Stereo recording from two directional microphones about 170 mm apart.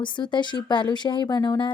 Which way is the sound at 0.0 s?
25° left (ahead or behind).